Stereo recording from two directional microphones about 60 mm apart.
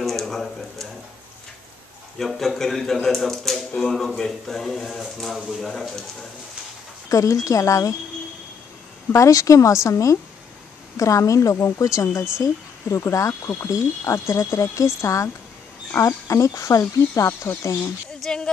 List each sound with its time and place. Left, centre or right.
0.0 s a sound: centre
2.1 s speech: centre
7.1 s a woman's voice: left
9.1 s a woman's voice: left
16.4 s speech: left
17.1 s a woman's voice: left
18.2 s speech: centre